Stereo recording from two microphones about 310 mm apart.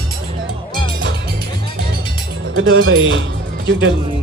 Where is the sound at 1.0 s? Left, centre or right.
Right.